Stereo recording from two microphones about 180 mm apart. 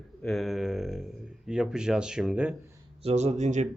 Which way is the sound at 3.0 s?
35° right (ahead or behind).